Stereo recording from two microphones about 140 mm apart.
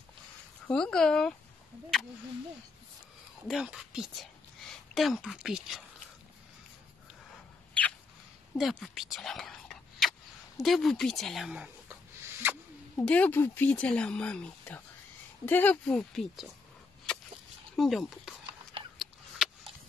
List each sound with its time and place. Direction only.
0.7 s speech: 5° left (ahead or behind)
3.4 s speech: 5° right (ahead or behind)
8.5 s speech: centre (ahead or behind); by 12.5 s 15° right (ahead or behind)
12.9 s speech: 10° left (ahead or behind)
17.7 s speech: centre (ahead or behind)
18.9 s a sound: 5° right (ahead or behind)